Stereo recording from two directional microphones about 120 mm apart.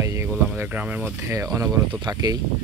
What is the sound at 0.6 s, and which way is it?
Speech, 10° right (ahead or behind).